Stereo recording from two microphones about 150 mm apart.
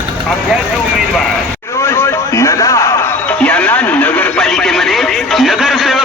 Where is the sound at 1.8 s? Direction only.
15° left (ahead or behind).